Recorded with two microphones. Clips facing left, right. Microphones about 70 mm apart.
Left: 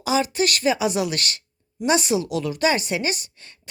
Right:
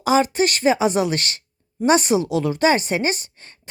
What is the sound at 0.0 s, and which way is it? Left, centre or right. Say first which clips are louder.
A woman's voice: right 4 dB; right.